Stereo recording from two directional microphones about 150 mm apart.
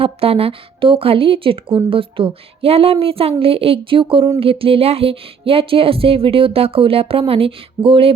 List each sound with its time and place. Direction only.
0.0 s speech: 40° right (ahead or behind)